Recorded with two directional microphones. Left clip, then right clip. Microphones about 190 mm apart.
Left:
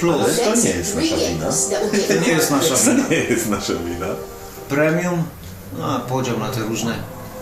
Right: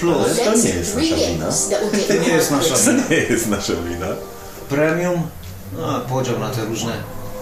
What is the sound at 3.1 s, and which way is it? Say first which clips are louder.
Speech: right 2 dB; 5° right (ahead or behind).